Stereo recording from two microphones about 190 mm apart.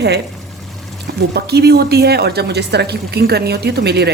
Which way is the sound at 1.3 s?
60° right (ahead or behind).